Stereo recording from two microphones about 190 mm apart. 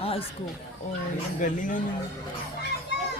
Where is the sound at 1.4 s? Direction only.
45° left (ahead or behind).